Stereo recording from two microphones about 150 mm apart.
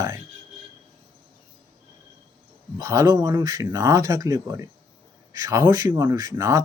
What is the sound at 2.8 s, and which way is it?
Speech, 20° right (ahead or behind).